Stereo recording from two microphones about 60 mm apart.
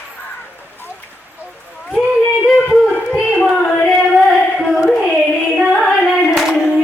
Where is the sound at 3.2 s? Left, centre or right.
Centre.